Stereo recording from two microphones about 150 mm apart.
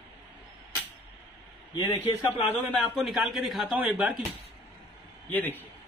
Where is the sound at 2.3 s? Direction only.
10° left (ahead or behind).